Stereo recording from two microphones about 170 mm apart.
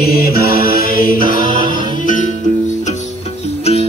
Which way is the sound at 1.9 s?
50° left (ahead or behind).